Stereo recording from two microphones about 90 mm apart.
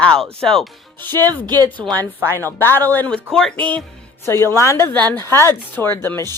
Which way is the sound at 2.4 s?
25° left (ahead or behind).